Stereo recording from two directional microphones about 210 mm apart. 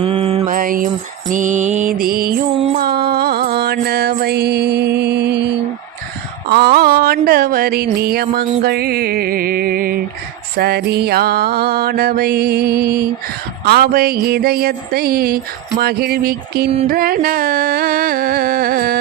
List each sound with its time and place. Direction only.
0.0 s music: 25° right (ahead or behind)
1.3 s mantra: 35° right (ahead or behind); by 5.5 s 55° right (ahead or behind)
6.5 s a sound: 50° right (ahead or behind)
10.6 s music: 50° right (ahead or behind)